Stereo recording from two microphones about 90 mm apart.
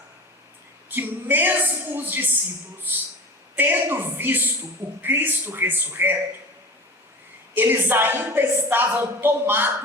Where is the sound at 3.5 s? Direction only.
20° right (ahead or behind).